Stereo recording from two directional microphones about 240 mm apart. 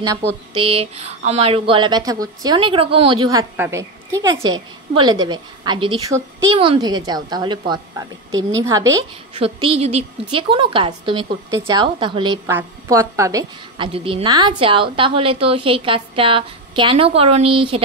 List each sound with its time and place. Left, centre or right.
0.0 s a woman's voice: centre
9.4 s a woman's voice: right